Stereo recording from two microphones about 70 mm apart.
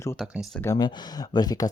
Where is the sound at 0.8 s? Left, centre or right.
Left.